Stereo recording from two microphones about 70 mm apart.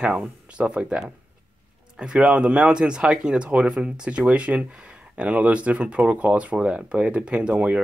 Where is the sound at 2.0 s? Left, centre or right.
Centre.